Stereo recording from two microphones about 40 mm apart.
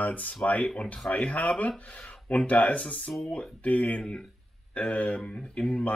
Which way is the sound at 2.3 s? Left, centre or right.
Left.